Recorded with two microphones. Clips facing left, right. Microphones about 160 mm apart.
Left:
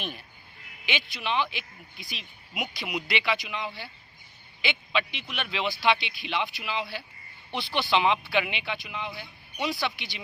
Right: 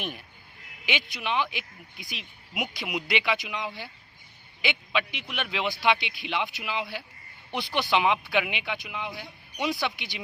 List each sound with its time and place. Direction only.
0.9 s speech: 20° right (ahead or behind)